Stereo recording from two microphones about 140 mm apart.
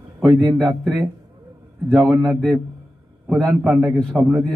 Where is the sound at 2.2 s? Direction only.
Centre (ahead or behind).